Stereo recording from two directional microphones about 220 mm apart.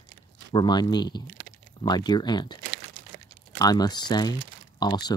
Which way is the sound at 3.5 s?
15° left (ahead or behind).